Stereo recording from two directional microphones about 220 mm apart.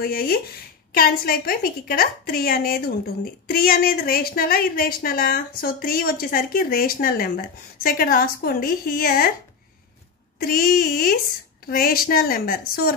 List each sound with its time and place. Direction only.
0.0 s a woman's voice: 45° left (ahead or behind)
10.4 s a woman's voice: 40° left (ahead or behind)